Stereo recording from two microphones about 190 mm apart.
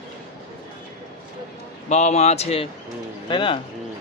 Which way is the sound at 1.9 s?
35° left (ahead or behind).